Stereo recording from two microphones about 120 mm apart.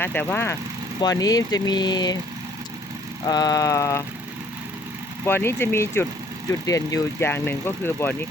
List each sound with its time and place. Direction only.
0.0 s speech: 15° left (ahead or behind)
1.0 s speech: 30° left (ahead or behind)
3.2 s speech: 30° left (ahead or behind)
5.2 s speech: 20° left (ahead or behind)